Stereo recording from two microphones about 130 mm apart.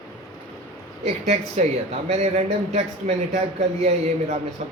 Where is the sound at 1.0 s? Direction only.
60° right (ahead or behind).